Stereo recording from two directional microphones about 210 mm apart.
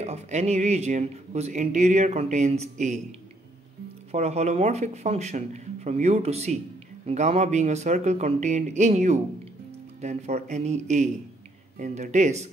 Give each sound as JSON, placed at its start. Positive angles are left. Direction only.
{"t": 0.0, "sound": "speech", "side_deg": -30}
{"t": 4.1, "sound": "speech", "side_deg": -30}